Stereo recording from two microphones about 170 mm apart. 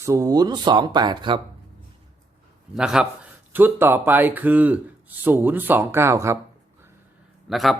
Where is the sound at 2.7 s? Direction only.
5° right (ahead or behind).